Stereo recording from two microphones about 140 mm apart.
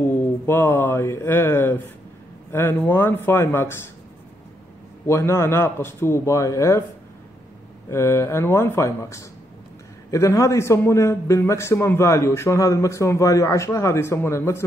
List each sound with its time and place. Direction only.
0.0 s speech: 15° left (ahead or behind)
5.0 s a man's voice: 20° left (ahead or behind)
7.9 s a man's voice: 20° left (ahead or behind)